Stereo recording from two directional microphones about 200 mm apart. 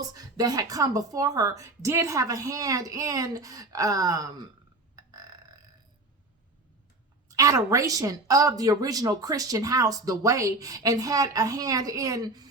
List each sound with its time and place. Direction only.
0.1 s a woman's voice: 20° right (ahead or behind)
7.3 s a woman's voice: 15° right (ahead or behind)